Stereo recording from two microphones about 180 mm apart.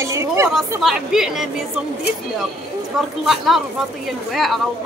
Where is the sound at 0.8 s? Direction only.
5° right (ahead or behind).